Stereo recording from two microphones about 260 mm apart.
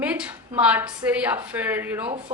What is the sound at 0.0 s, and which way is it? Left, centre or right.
A woman's voice, centre.